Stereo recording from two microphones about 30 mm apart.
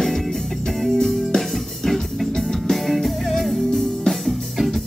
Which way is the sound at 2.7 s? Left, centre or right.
Centre.